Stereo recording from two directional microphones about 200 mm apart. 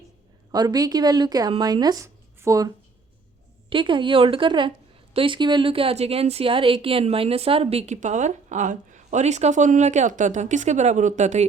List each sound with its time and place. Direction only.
0.5 s speech: 20° right (ahead or behind); by 11.4 s 35° right (ahead or behind)